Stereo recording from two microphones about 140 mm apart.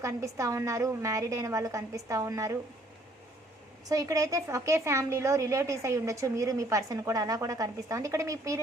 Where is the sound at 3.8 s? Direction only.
25° right (ahead or behind).